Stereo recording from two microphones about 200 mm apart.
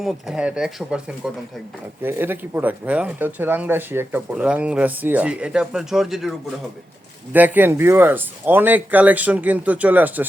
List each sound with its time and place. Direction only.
0.0 s speech: 5° right (ahead or behind)
7.3 s speech: 10° right (ahead or behind)